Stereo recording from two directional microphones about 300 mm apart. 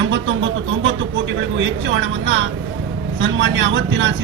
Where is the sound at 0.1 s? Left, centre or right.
Right.